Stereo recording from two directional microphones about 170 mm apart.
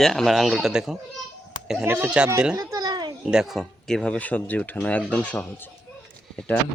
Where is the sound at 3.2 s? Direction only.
5° right (ahead or behind).